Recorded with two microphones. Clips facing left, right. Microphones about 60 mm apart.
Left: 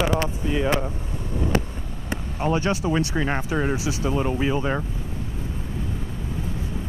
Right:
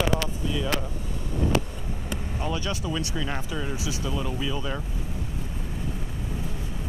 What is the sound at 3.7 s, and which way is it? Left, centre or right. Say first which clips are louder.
Speech: left 5 dB; left.